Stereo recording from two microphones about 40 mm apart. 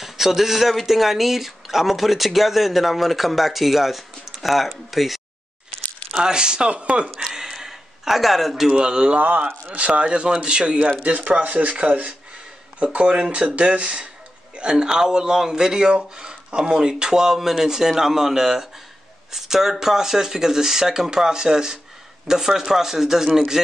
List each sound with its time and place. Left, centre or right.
0.0 s speech: centre
6.1 s speech: centre
7.3 s a sound: centre
8.6 s speech: right
9.5 s speech: right; by 23.6 s centre